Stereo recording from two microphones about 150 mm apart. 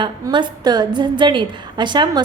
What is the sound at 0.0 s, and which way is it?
A woman's voice, 30° right (ahead or behind).